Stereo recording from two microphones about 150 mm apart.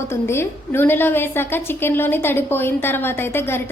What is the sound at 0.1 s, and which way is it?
A woman's voice, 15° left (ahead or behind).